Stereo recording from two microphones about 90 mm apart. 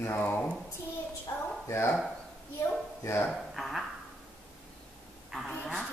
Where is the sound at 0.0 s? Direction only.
25° left (ahead or behind).